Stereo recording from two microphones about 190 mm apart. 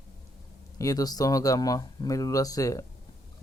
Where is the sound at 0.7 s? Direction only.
20° left (ahead or behind).